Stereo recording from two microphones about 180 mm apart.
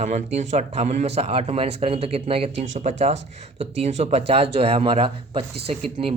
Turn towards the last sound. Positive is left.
turn(degrees=-35)  # may be behind; listen again after turning